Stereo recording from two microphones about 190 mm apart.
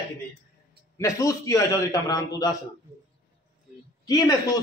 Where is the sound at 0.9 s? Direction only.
15° left (ahead or behind).